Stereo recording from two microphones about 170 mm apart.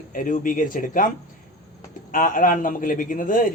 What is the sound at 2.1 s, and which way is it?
Speech, 50° left (ahead or behind).